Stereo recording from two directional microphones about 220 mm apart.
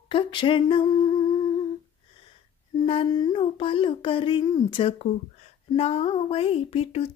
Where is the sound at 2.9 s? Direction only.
20° left (ahead or behind).